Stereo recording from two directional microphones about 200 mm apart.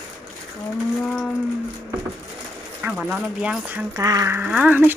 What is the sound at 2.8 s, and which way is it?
Speech, 5° right (ahead or behind).